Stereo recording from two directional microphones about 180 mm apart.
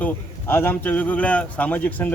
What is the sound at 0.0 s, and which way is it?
A man's voice, 10° left (ahead or behind).